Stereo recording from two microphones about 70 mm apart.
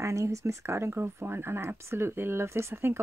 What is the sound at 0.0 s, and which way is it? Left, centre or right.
A woman's voice, right.